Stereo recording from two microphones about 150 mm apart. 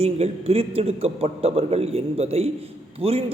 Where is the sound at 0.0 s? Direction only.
45° right (ahead or behind).